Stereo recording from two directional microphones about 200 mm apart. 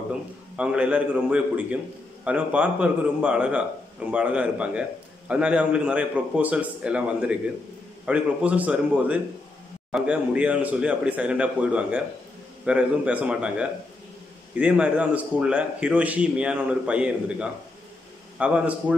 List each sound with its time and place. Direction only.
0.1 s a man's voice: 5° right (ahead or behind)